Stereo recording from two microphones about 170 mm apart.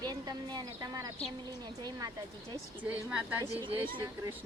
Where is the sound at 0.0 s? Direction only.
25° right (ahead or behind).